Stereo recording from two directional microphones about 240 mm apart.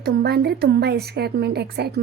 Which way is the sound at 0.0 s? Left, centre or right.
Right.